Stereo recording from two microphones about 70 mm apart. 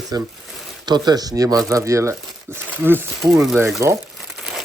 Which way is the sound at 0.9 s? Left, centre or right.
Right.